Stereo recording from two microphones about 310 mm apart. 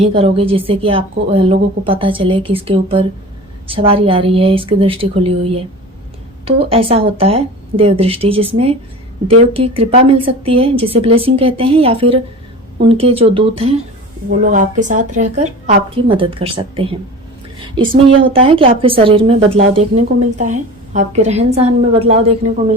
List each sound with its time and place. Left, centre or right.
0.0 s a woman's voice: centre